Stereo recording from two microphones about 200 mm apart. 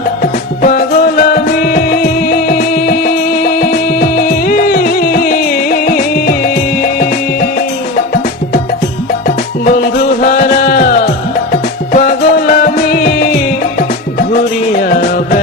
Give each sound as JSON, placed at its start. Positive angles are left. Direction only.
{"t": 0.2, "sound": "music", "side_deg": 45}